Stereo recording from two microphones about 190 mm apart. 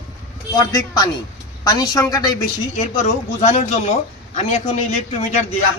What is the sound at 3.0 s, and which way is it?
A man's voice, 40° left (ahead or behind).